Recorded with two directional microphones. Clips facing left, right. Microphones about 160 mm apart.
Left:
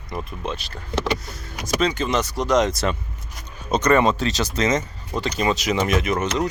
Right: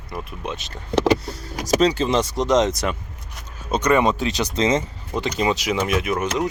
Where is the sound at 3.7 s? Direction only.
10° right (ahead or behind).